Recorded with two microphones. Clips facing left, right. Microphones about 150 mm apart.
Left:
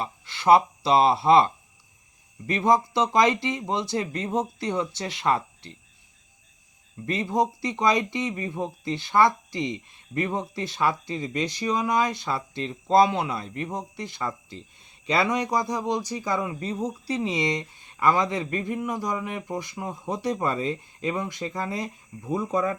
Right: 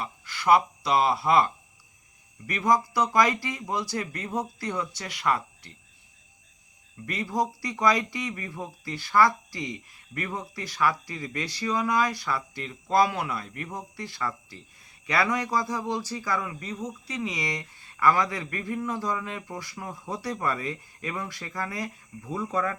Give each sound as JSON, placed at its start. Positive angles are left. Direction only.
{"t": 0.0, "sound": "speech", "side_deg": 25}
{"t": 2.5, "sound": "speech", "side_deg": 25}
{"t": 7.0, "sound": "speech", "side_deg": 25}